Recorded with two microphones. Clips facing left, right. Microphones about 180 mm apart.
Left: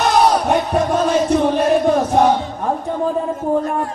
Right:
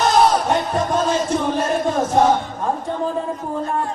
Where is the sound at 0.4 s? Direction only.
60° left (ahead or behind).